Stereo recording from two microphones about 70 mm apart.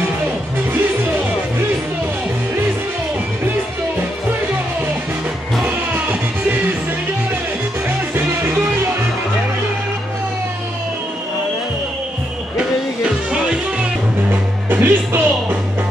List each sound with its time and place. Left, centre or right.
5.6 s music: right
13.0 s music: centre
14.3 s music: right